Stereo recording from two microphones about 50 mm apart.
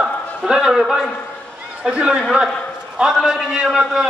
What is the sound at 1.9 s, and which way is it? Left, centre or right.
A man's voice, centre.